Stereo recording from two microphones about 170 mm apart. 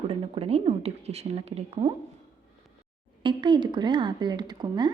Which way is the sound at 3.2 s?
25° right (ahead or behind).